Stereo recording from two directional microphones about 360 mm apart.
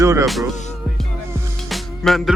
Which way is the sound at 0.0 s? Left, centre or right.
Centre.